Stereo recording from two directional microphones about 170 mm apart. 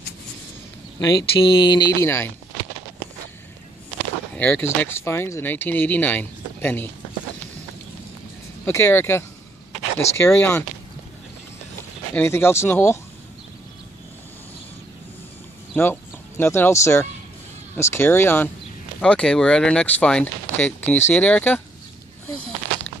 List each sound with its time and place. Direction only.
1.0 s speech: 25° left (ahead or behind)
4.4 s speech: 10° left (ahead or behind)
8.6 s speech: 15° left (ahead or behind)
12.2 s speech: 15° left (ahead or behind)
15.7 s speech: 10° left (ahead or behind)